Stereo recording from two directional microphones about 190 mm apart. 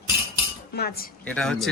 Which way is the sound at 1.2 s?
5° left (ahead or behind).